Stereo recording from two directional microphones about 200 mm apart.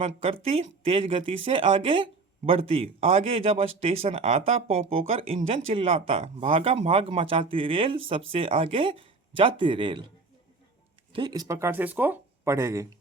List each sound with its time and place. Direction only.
0.5 s speech: 30° right (ahead or behind)
11.1 s speech: 20° right (ahead or behind)